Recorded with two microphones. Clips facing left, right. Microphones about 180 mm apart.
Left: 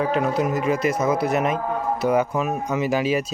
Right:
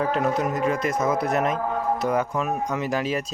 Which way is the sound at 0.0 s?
5° left (ahead or behind).